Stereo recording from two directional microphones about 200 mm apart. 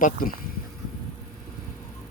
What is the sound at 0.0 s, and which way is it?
Speech, 45° left (ahead or behind).